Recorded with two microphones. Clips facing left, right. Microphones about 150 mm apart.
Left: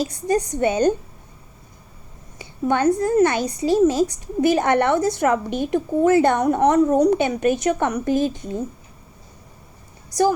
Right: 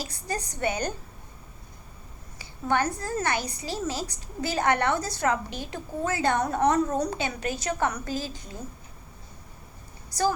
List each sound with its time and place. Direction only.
0.0 s a woman's voice: 20° left (ahead or behind)
2.4 s a woman's voice: 20° left (ahead or behind)
10.1 s speech: 20° left (ahead or behind)